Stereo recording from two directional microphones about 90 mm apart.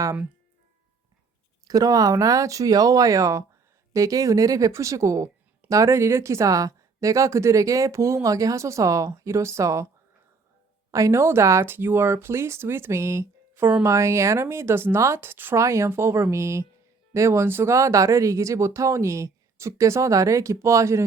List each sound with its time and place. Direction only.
1.6 s speech: 45° right (ahead or behind)
10.9 s speech: 35° right (ahead or behind)
17.7 s speech: 35° right (ahead or behind)